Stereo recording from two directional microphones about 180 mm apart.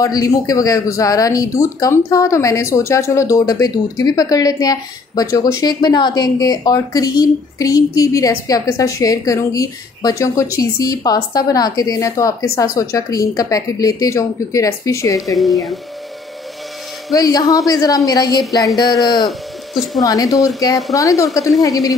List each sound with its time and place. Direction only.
0.0 s speech: 20° left (ahead or behind)
15.1 s speech: centre (ahead or behind)
17.1 s speech: 20° left (ahead or behind)
19.2 s speech: centre (ahead or behind)
20.0 s speech: 20° left (ahead or behind)
20.3 s speech: centre (ahead or behind)
20.9 s a woman's voice: 20° left (ahead or behind)
21.3 s speech: centre (ahead or behind)
21.6 s speech: 20° left (ahead or behind)